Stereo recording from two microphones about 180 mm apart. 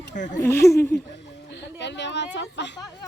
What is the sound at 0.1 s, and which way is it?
Speech, 45° left (ahead or behind).